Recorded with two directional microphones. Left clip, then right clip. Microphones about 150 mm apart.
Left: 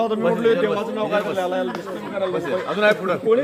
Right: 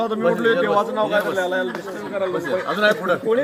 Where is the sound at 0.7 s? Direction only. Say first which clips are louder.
Right 3 dB; 10° right (ahead or behind).